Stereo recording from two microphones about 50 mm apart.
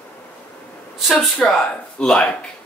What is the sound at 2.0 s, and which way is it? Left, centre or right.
Speech, centre.